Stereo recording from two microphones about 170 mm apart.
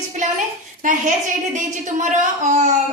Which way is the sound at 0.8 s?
50° right (ahead or behind).